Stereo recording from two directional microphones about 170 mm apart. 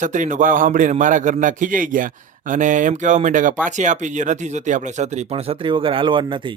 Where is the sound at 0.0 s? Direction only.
50° right (ahead or behind); by 6.4 s 30° right (ahead or behind).